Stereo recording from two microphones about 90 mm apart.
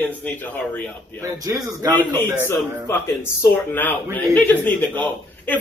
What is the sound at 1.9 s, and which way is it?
A man's voice, 20° left (ahead or behind).